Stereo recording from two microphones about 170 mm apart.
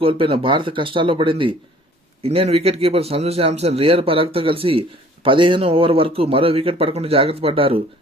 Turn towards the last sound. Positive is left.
turn(degrees=-35)  # may be behind; listen again after turning